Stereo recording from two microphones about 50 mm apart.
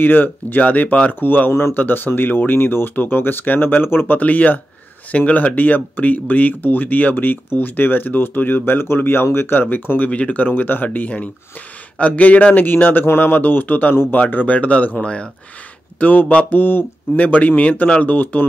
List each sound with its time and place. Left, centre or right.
0.0 s speech: left
4.2 s speech: left